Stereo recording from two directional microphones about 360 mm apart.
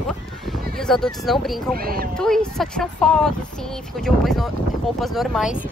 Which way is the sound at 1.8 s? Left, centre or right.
Right.